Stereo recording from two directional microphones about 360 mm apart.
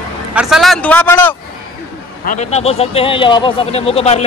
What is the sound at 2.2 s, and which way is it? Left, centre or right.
Speech, left.